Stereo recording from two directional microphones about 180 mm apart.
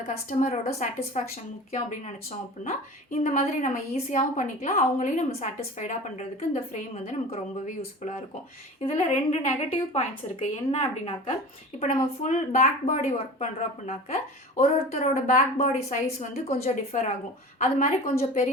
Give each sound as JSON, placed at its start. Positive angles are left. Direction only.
{"t": 0.1, "sound": "a woman's voice", "side_deg": 45}
{"t": 2.6, "sound": "a woman's voice", "side_deg": 45}
{"t": 11.8, "sound": "a woman's voice", "side_deg": 45}